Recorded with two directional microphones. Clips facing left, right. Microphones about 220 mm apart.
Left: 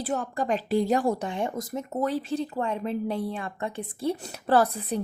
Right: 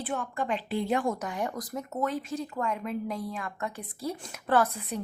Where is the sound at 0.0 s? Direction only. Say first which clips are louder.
Left 4 dB; 40° left (ahead or behind).